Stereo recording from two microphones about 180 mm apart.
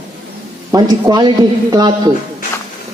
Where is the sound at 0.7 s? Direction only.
20° right (ahead or behind).